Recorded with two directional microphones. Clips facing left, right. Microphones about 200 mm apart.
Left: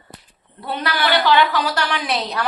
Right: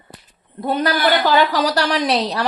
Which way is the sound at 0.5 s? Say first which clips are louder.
Right 5 dB; 45° right (ahead or behind).